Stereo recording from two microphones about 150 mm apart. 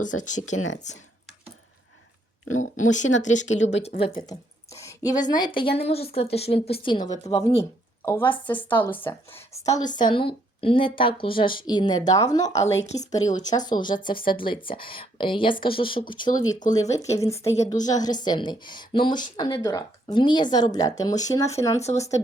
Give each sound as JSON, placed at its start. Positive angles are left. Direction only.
{"t": 0.0, "sound": "speech", "side_deg": 60}
{"t": 2.6, "sound": "speech", "side_deg": 55}
{"t": 4.0, "sound": "speech", "side_deg": 35}
{"t": 4.7, "sound": "a sound", "side_deg": 20}
{"t": 5.4, "sound": "speech", "side_deg": 35}
{"t": 7.6, "sound": "speech", "side_deg": 15}
{"t": 16.6, "sound": "speech", "side_deg": 55}
{"t": 17.0, "sound": "speech", "side_deg": 20}